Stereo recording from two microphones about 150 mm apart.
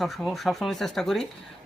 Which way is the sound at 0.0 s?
Centre (ahead or behind).